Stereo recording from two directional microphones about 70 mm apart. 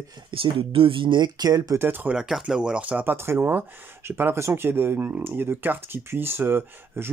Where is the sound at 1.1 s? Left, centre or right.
Right.